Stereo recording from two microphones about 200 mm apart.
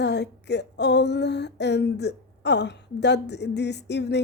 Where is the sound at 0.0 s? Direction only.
60° left (ahead or behind).